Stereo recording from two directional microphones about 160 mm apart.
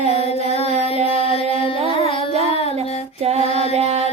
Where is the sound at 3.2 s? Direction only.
40° right (ahead or behind).